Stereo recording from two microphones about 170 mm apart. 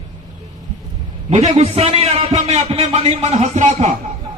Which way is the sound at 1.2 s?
40° right (ahead or behind).